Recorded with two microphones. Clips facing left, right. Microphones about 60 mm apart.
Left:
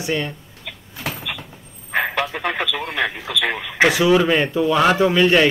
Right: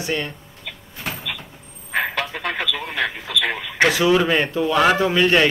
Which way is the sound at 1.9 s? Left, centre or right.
Centre.